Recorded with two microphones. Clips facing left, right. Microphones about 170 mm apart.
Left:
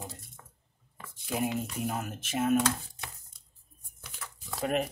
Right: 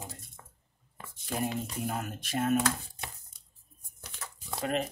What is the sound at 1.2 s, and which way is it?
Speech, 5° left (ahead or behind).